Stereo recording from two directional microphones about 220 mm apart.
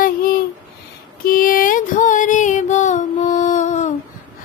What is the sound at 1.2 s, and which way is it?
Music, 40° left (ahead or behind).